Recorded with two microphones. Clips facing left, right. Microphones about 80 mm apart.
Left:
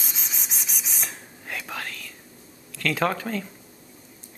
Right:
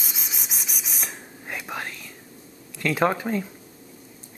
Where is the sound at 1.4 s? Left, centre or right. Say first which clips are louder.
Right 1 dB; centre.